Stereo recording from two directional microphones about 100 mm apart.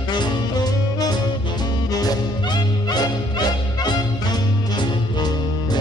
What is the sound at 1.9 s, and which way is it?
Music, 45° left (ahead or behind).